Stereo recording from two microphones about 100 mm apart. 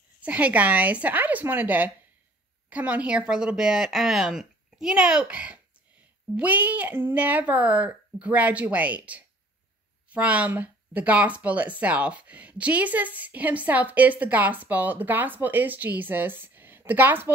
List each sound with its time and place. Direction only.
0.2 s a woman's voice: 15° right (ahead or behind)